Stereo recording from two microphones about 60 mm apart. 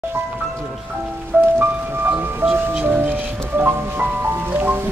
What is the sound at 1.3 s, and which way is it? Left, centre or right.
Music, right.